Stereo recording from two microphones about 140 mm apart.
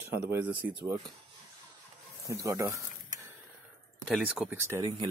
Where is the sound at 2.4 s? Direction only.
20° right (ahead or behind).